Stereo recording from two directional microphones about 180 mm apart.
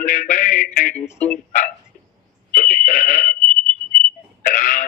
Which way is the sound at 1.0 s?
40° left (ahead or behind).